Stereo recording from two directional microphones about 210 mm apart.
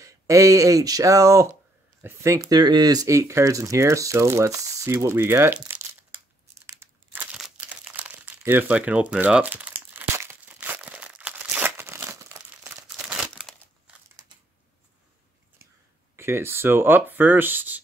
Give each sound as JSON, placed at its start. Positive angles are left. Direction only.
{"t": 0.0, "sound": "speech", "side_deg": -15}
{"t": 2.0, "sound": "a sound", "side_deg": -10}
{"t": 12.8, "sound": "crumpling", "side_deg": -5}
{"t": 16.2, "sound": "speech", "side_deg": -10}